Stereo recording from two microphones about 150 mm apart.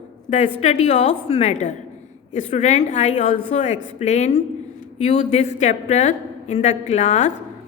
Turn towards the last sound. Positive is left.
turn(degrees=50)  # may be behind; listen again after turning